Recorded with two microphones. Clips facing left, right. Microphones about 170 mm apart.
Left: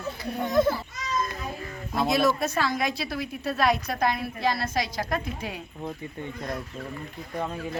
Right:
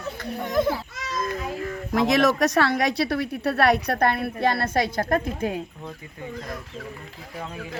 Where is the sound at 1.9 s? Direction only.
90° right; by 5.6 s 50° right (ahead or behind).